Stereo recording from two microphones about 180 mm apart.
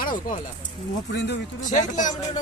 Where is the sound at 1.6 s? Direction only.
45° left (ahead or behind).